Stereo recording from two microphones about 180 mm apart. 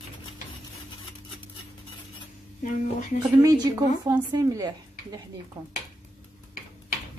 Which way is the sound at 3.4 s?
20° right (ahead or behind).